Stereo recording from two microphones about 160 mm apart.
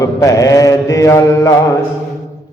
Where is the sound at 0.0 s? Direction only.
20° left (ahead or behind).